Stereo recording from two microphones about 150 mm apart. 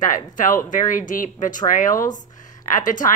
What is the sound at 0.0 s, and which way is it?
A woman's voice, 60° left (ahead or behind).